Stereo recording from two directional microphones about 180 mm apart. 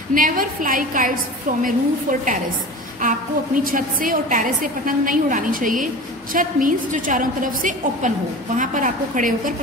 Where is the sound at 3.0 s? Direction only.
50° right (ahead or behind).